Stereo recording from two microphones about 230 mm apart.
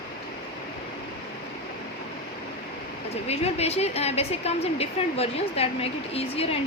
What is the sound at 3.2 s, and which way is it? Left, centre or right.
Speech, left.